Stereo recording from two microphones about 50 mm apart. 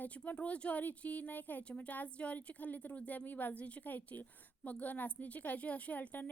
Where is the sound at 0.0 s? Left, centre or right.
Left.